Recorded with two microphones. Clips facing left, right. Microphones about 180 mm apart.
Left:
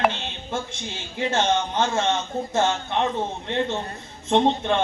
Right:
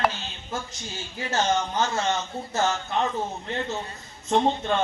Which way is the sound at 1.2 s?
30° left (ahead or behind).